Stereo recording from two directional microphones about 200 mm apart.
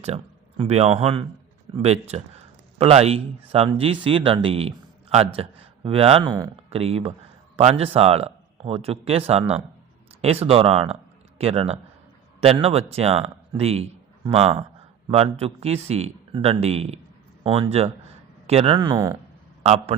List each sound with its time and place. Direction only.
0.0 s a man's voice: 30° right (ahead or behind)